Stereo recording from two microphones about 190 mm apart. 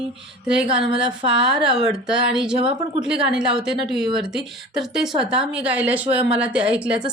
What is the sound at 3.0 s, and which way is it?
A woman's voice, 5° right (ahead or behind).